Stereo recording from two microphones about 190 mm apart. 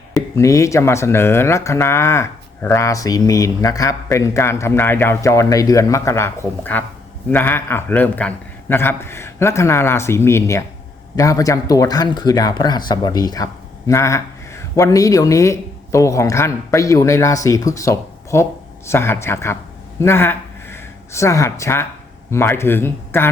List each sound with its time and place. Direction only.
0.3 s speech: 15° left (ahead or behind)